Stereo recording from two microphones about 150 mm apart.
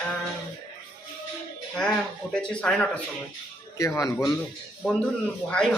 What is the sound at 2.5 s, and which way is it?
Speech, 5° left (ahead or behind).